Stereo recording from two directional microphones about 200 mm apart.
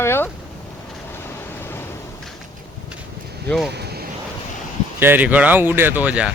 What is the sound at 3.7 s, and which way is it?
Vehicle, 55° right (ahead or behind).